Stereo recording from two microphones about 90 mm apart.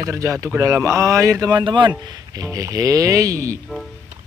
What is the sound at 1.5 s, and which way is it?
Speech, 60° right (ahead or behind).